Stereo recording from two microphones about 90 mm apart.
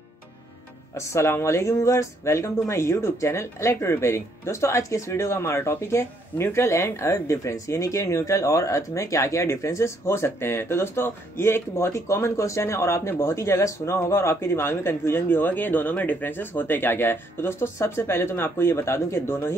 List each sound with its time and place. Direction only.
0.9 s speech: 30° left (ahead or behind)